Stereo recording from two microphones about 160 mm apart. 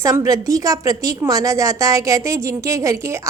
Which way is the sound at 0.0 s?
20° right (ahead or behind).